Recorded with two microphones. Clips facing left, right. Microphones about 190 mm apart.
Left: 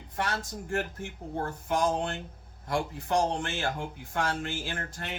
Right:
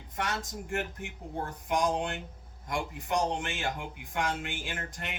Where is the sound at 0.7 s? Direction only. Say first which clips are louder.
Left 3 dB; 15° right (ahead or behind).